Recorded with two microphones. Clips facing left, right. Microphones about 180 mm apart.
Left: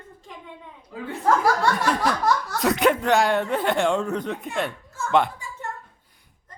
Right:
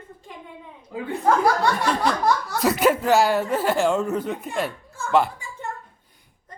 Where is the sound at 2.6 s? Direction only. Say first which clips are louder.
Right 1 dB; centre (ahead or behind).